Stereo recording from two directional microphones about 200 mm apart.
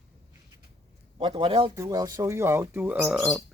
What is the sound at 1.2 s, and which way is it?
Speech, 25° right (ahead or behind).